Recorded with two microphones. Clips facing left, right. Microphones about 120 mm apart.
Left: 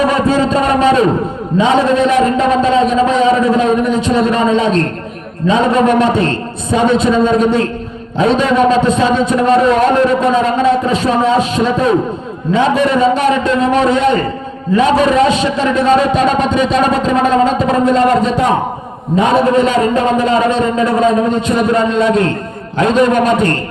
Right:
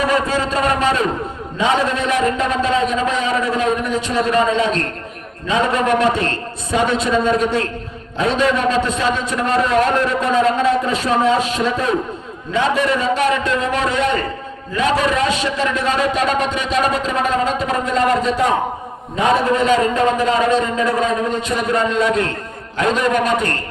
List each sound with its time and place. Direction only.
0.0 s a man's voice: 20° left (ahead or behind)